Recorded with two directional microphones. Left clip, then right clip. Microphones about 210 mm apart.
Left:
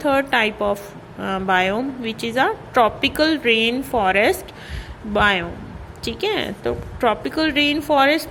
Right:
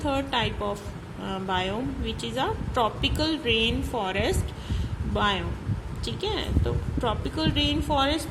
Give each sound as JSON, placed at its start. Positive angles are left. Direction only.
{"t": 0.0, "sound": "a woman's voice", "side_deg": 15}